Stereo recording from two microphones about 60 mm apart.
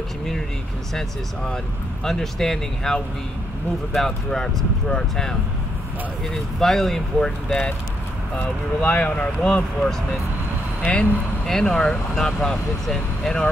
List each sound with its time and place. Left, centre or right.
2.0 s speech: centre
6.3 s speech: centre
8.4 s speech: left
11.4 s speech: centre